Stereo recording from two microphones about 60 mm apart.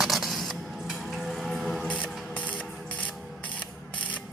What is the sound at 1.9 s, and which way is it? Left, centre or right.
Music, left.